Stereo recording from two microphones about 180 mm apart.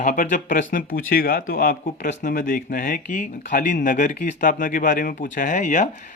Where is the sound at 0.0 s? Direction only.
45° left (ahead or behind).